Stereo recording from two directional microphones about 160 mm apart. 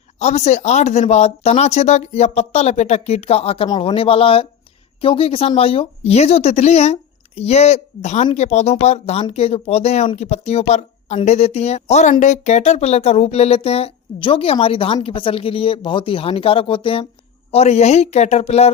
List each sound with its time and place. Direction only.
0.2 s speech: 45° left (ahead or behind)